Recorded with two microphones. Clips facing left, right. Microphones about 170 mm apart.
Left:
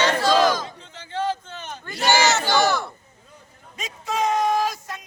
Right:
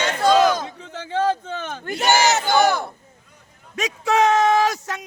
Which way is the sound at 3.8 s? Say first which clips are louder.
Right 7 dB; 80° right.